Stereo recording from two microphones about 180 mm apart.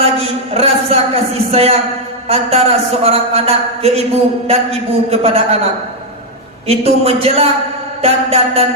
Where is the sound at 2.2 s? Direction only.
35° right (ahead or behind).